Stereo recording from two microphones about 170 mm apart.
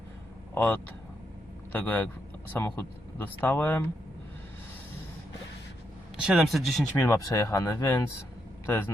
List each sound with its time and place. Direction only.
0.5 s speech: 10° left (ahead or behind)
6.1 s a man's voice: 5° right (ahead or behind)
7.0 s speech: 15° left (ahead or behind)